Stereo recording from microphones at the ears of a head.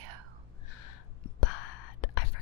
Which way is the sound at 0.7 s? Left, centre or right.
Left.